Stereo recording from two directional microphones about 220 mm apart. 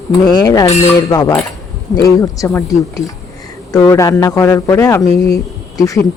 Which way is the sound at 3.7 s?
15° left (ahead or behind).